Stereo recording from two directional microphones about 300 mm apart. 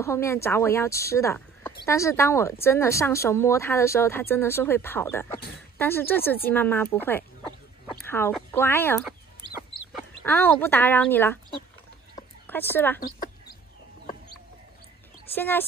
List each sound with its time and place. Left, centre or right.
0.0 s a woman's voice: centre
10.2 s a woman's voice: centre
12.4 s speech: centre
13.0 s bird: left
15.3 s speech: centre